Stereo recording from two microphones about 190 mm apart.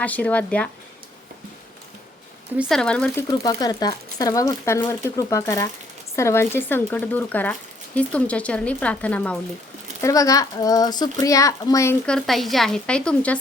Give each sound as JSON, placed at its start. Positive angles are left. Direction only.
{"t": 0.0, "sound": "speech", "side_deg": 10}
{"t": 2.6, "sound": "speech", "side_deg": 0}
{"t": 3.2, "sound": "speech", "side_deg": 20}
{"t": 10.0, "sound": "speech", "side_deg": 15}
{"t": 12.0, "sound": "speech", "side_deg": 0}